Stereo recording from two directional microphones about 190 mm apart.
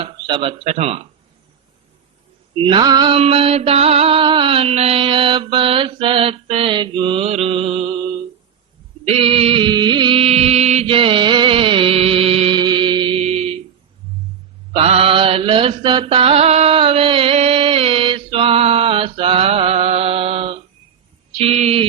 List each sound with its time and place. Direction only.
0.0 s a sound: 25° right (ahead or behind)
0.6 s speech: 35° right (ahead or behind)
2.6 s mantra: 25° right (ahead or behind)
9.0 s music: 30° right (ahead or behind)
14.7 s mantra: 30° right (ahead or behind)
21.3 s a sound: 35° right (ahead or behind)